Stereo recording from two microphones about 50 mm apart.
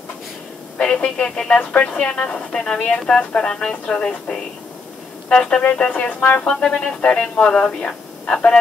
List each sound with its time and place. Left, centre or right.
0.7 s speech: left
1.6 s speech: left
1.9 s speech: centre
5.6 s speech: left
6.1 s speech: left
6.7 s speech: left